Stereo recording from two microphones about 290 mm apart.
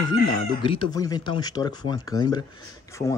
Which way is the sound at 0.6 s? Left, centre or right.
Centre.